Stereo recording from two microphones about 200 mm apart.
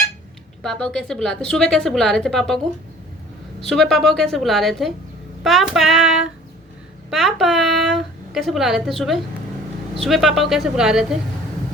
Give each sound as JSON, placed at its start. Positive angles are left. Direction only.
{"t": 0.6, "sound": "a woman's voice", "side_deg": 5}
{"t": 3.6, "sound": "a woman's voice", "side_deg": 0}